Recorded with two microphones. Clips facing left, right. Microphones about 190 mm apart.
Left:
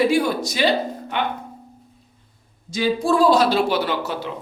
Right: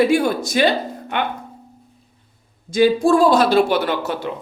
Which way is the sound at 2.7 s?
50° right (ahead or behind).